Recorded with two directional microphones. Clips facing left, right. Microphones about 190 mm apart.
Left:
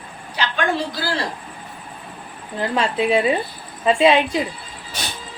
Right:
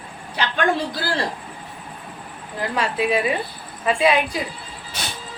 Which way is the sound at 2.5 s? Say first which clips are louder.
Left 3 dB; 25° left (ahead or behind).